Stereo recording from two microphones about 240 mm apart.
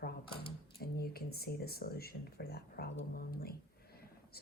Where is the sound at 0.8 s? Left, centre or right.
Left.